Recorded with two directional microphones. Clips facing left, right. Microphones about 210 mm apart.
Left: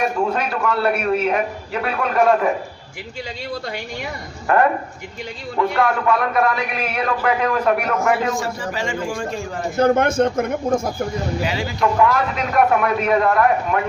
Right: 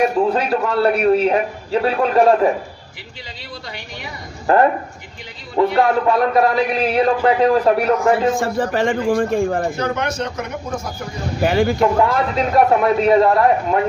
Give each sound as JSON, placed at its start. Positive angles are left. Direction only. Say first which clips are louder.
{"t": 0.3, "sound": "a man's voice", "louder": "right 4 dB", "side_deg": -30}
{"t": 4.5, "sound": "a man's voice", "louder": "right 3 dB", "side_deg": -30}
{"t": 8.4, "sound": "a man's voice", "louder": "right 6 dB", "side_deg": -55}
{"t": 9.7, "sound": "speech", "louder": "left 6 dB", "side_deg": 50}
{"t": 11.4, "sound": "a man's voice", "louder": "right 8 dB", "side_deg": -55}
{"t": 11.8, "sound": "a man's voice", "louder": "right 2 dB", "side_deg": -25}